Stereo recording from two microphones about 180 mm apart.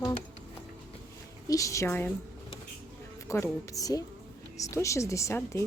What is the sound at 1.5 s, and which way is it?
Speech, 20° left (ahead or behind).